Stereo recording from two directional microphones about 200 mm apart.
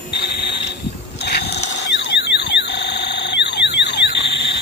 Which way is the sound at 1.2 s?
55° left (ahead or behind).